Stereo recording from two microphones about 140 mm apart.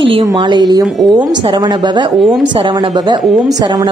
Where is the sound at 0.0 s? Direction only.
40° right (ahead or behind).